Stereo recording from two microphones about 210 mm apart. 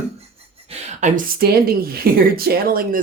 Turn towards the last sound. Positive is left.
turn(degrees=-45)  # may be behind; listen again after turning